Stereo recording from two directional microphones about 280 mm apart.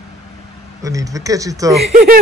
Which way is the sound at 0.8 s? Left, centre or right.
Centre.